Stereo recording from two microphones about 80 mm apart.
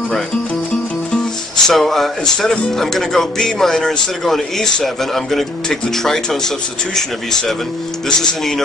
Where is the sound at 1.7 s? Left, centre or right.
Centre.